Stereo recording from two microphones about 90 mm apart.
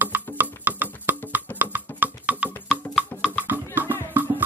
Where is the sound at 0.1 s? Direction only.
20° right (ahead or behind).